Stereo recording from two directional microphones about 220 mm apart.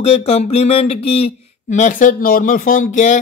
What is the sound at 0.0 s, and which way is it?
Speech, 30° left (ahead or behind).